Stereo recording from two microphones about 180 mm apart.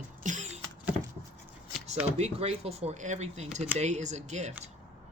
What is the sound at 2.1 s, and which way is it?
Speech, 35° right (ahead or behind).